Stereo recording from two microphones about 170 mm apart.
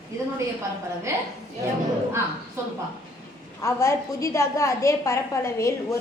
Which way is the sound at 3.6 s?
15° left (ahead or behind).